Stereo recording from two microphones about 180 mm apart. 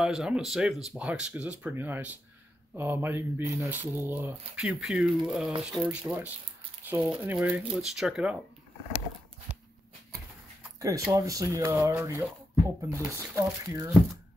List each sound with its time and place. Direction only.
0.0 s speech: 5° right (ahead or behind)
10.8 s speech: 20° right (ahead or behind)